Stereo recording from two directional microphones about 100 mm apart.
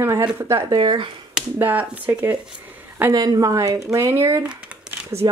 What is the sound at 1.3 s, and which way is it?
Speech, 15° right (ahead or behind).